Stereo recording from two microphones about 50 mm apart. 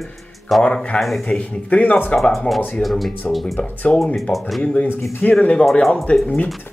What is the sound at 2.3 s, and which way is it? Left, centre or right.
Speech, centre.